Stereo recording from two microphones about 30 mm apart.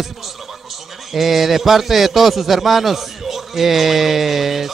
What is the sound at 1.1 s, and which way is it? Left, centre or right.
A man's voice, centre.